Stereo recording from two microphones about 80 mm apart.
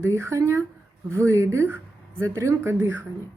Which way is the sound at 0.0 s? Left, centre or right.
Right.